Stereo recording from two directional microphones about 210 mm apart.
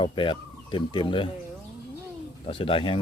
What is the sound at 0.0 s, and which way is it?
Speech, 25° left (ahead or behind).